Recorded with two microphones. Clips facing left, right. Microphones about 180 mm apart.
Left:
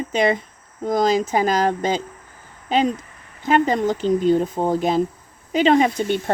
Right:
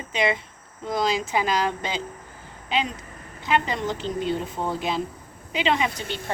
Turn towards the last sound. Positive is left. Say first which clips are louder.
# left 8 dB
turn(degrees=45)  # may be behind; listen again after turning